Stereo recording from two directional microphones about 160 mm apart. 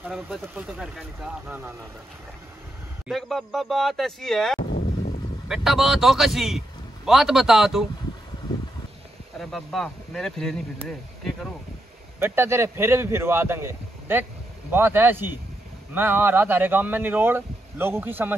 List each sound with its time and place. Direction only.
0.0 s speech: 5° right (ahead or behind)
3.1 s speech: centre (ahead or behind)
4.6 s a sound: 65° left (ahead or behind)
5.5 s speech: 5° right (ahead or behind)
9.4 s speech: centre (ahead or behind)
12.2 s speech: 15° right (ahead or behind)